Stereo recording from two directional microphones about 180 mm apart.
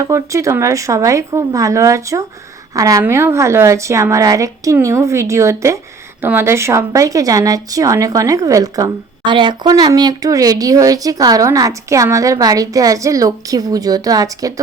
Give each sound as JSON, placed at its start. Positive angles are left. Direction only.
{"t": 0.0, "sound": "a woman's voice", "side_deg": -15}